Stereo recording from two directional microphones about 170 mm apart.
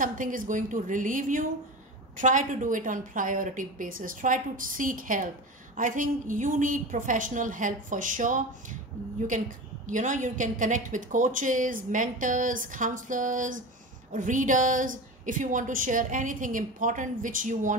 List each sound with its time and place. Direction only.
0.0 s a woman's voice: 50° right (ahead or behind)
9.8 s a woman's voice: 45° right (ahead or behind)